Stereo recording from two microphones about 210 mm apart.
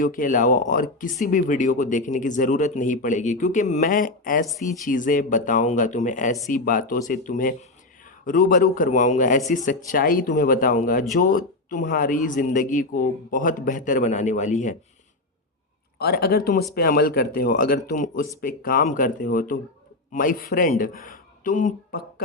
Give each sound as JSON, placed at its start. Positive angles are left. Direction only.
{"t": 0.0, "sound": "speech", "side_deg": 40}
{"t": 16.0, "sound": "speech", "side_deg": 45}